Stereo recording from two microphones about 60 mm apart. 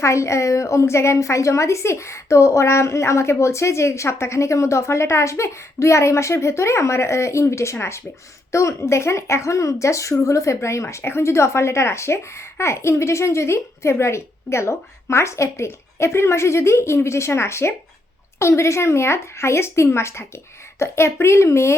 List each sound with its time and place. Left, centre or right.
0.0 s speech: left